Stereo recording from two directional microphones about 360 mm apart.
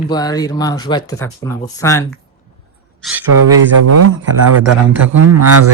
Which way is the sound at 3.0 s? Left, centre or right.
Centre.